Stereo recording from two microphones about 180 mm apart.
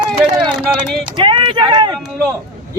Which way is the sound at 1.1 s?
25° right (ahead or behind).